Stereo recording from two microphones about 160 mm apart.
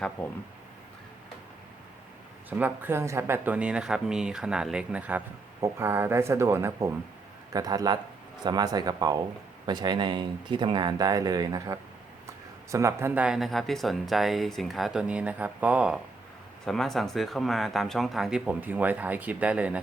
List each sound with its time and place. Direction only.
2.5 s speech: 10° right (ahead or behind)